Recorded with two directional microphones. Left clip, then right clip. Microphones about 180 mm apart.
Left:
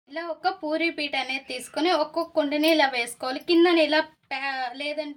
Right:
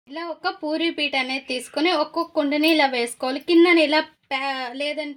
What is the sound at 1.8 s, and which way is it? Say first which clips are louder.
A woman's voice: right 2 dB; 35° right (ahead or behind).